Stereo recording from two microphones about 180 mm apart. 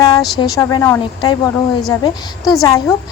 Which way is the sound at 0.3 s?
20° left (ahead or behind).